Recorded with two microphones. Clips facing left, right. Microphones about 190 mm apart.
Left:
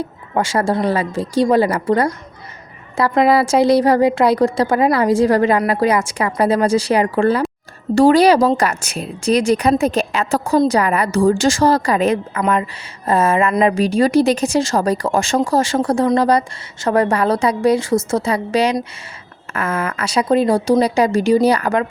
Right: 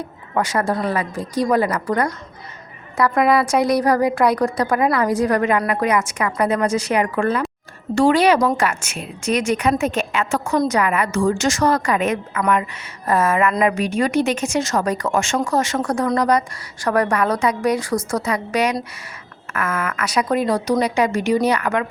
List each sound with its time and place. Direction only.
0.3 s a woman's voice: 25° left (ahead or behind)